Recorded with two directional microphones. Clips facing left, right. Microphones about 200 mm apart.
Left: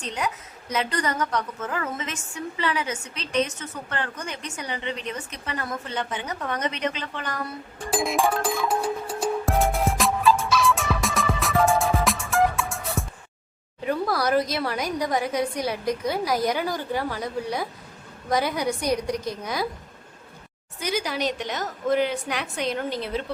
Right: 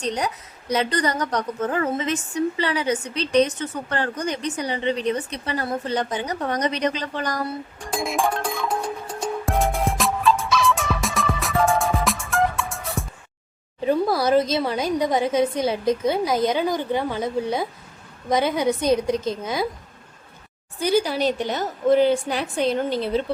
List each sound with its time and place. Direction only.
0.0 s a woman's voice: 35° right (ahead or behind)
7.9 s music: centre (ahead or behind)
13.8 s a woman's voice: 25° right (ahead or behind)
20.7 s a woman's voice: 30° right (ahead or behind)